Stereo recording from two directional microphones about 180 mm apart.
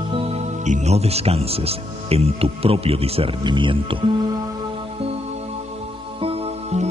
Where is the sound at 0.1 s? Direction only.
40° right (ahead or behind).